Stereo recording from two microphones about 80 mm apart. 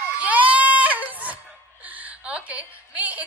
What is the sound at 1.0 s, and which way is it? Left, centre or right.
Speech, centre.